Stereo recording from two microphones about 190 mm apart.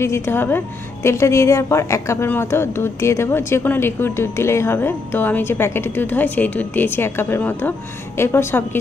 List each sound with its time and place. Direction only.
0.0 s a woman's voice: 15° left (ahead or behind)